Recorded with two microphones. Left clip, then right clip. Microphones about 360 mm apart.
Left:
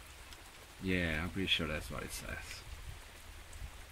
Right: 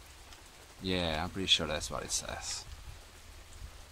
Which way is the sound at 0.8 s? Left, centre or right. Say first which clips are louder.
Right 2 dB; right.